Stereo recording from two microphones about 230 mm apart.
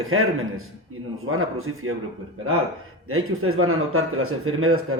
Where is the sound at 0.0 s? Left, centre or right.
Right.